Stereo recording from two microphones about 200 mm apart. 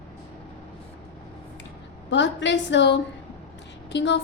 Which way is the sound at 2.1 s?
65° left (ahead or behind).